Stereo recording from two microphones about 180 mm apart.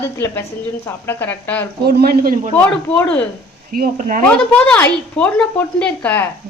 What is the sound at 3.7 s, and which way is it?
Speech, 50° right (ahead or behind).